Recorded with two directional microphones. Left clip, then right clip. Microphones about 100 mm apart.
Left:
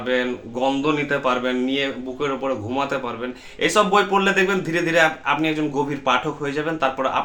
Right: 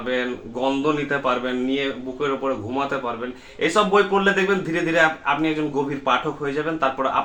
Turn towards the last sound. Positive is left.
turn(degrees=20)  # may be behind; listen again after turning